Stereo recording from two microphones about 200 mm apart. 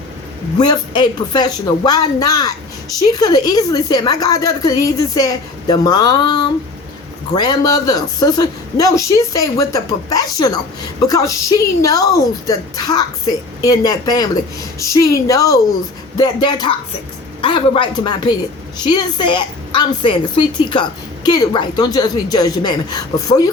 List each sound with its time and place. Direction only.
0.6 s a woman's voice: 20° left (ahead or behind)